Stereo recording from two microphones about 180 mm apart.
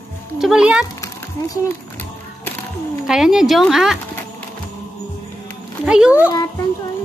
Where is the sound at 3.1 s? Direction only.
Centre (ahead or behind).